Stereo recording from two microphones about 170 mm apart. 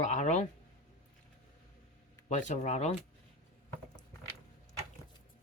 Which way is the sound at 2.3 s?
45° left (ahead or behind).